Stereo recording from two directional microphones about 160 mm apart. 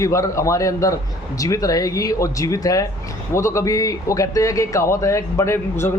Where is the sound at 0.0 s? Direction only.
20° left (ahead or behind).